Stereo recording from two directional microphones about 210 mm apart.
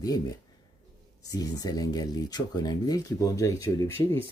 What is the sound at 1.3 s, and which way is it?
Speech, 15° left (ahead or behind).